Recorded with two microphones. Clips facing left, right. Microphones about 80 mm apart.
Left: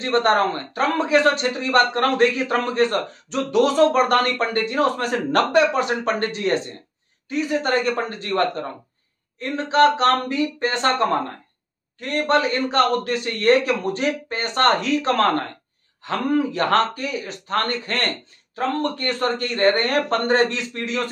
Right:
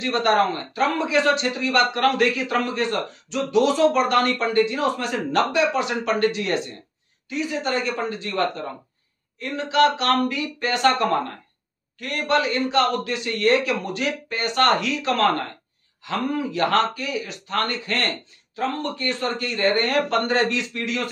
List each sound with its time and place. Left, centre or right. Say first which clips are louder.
0.0 s speech: left 1 dB; left
9.4 s speech: left 2 dB; left